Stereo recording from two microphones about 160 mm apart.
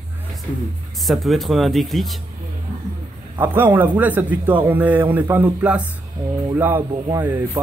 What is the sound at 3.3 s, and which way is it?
A man's voice, 10° right (ahead or behind).